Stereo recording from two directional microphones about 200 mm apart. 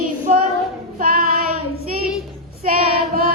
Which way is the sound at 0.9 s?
45° right (ahead or behind).